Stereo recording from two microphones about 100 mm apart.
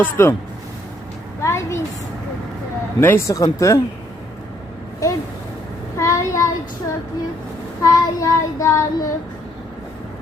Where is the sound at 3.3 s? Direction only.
35° left (ahead or behind).